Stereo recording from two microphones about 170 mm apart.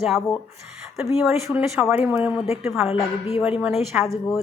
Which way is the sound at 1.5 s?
5° right (ahead or behind).